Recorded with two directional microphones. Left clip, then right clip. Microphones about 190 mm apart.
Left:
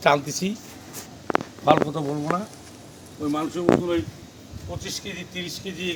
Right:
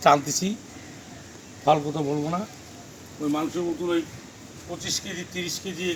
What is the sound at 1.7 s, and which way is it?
Speech, centre (ahead or behind).